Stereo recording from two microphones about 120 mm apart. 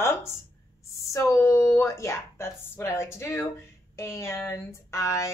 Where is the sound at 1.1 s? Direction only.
25° left (ahead or behind).